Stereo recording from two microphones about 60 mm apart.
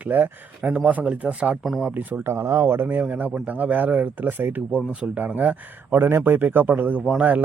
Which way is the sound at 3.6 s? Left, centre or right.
Right.